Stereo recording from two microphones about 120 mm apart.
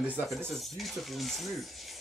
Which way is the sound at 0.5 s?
Centre (ahead or behind).